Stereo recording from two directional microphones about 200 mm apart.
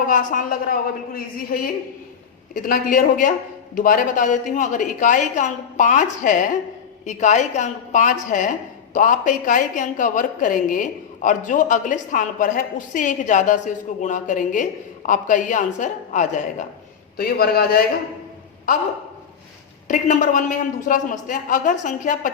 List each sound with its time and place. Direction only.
0.1 s a woman's voice: 40° left (ahead or behind)
17.2 s a woman's voice: 50° left (ahead or behind)
18.7 s a woman's voice: 40° left (ahead or behind)
19.9 s a woman's voice: 40° left (ahead or behind)